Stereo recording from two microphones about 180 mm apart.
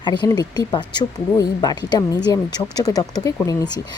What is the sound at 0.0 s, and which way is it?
Speech, 25° left (ahead or behind).